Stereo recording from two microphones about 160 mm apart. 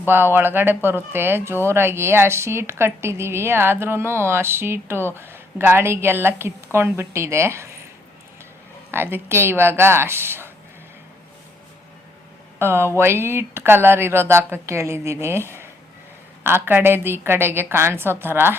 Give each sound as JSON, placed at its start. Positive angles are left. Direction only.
{"t": 0.0, "sound": "a woman's voice", "side_deg": -15}
{"t": 8.9, "sound": "a woman's voice", "side_deg": -15}
{"t": 12.5, "sound": "a woman's voice", "side_deg": -15}